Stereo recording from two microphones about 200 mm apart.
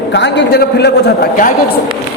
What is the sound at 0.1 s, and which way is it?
A man's voice, 60° left (ahead or behind).